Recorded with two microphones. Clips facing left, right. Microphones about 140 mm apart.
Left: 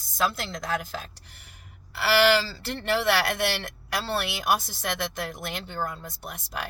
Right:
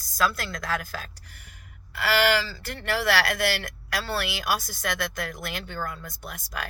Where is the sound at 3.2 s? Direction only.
25° left (ahead or behind).